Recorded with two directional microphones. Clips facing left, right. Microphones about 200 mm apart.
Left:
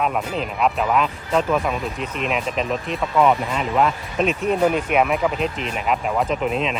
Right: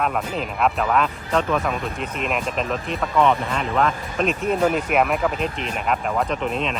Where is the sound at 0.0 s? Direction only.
Centre (ahead or behind).